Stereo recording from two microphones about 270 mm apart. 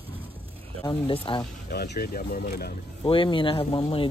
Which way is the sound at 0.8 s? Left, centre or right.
Centre.